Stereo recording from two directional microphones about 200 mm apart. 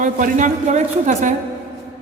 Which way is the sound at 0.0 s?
40° right (ahead or behind).